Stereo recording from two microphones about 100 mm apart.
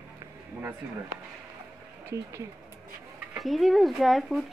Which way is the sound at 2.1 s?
30° right (ahead or behind).